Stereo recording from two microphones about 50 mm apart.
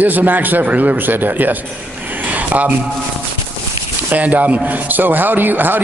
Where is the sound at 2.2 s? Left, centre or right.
Right.